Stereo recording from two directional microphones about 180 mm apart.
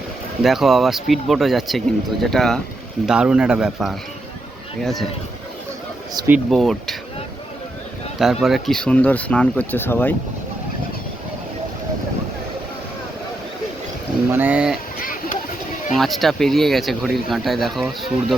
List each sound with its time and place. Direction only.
0.4 s speech: centre (ahead or behind)
6.2 s speech: 20° right (ahead or behind)
6.5 s speech: centre (ahead or behind)
8.2 s speech: centre (ahead or behind)
14.3 s speech: 10° right (ahead or behind)
15.0 s vehicle: 50° left (ahead or behind)
15.9 s speech: centre (ahead or behind)